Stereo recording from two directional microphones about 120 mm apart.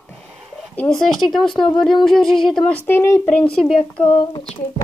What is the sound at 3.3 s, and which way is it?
Speech, 10° left (ahead or behind).